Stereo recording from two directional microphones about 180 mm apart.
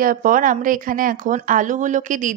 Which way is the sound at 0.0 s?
50° right (ahead or behind).